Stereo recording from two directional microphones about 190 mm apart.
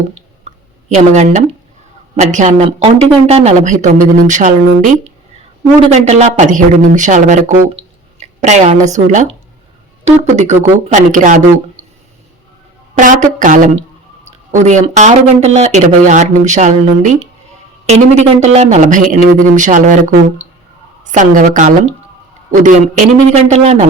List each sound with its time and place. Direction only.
0.1 s a sound: 35° right (ahead or behind)
2.1 s speech: 40° right (ahead or behind)
13.0 s speech: 45° right (ahead or behind)